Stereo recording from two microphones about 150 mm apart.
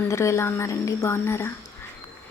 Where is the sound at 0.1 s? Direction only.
20° left (ahead or behind).